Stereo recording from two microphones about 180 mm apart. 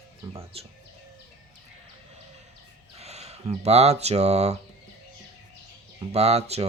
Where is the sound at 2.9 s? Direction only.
35° right (ahead or behind).